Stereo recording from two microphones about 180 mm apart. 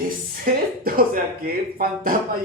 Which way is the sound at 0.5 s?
50° right (ahead or behind).